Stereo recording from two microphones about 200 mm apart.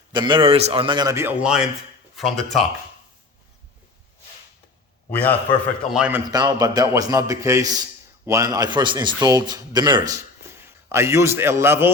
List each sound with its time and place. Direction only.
0.1 s a man's voice: 25° right (ahead or behind); by 2.6 s centre (ahead or behind)
5.1 s a man's voice: 10° left (ahead or behind)
5.9 s a man's voice: 5° right (ahead or behind)
6.2 s a man's voice: 20° right (ahead or behind)